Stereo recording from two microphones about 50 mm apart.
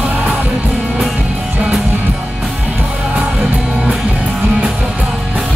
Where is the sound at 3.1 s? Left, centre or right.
Right.